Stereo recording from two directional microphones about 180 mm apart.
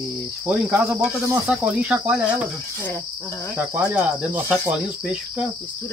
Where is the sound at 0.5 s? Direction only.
10° right (ahead or behind).